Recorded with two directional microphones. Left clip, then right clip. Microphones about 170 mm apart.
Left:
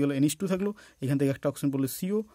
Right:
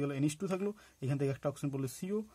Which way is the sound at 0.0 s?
55° left (ahead or behind).